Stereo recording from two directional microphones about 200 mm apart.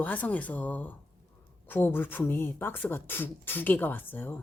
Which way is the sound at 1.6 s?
10° left (ahead or behind).